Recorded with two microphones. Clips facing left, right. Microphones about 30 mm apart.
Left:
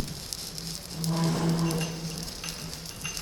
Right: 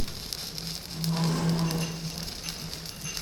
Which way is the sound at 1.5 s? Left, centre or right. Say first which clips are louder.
Left 1 dB; right.